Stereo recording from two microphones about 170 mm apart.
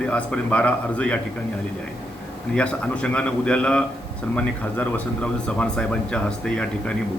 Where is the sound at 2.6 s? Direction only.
5° left (ahead or behind).